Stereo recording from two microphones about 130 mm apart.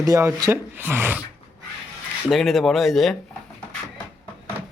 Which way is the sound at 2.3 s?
Centre (ahead or behind).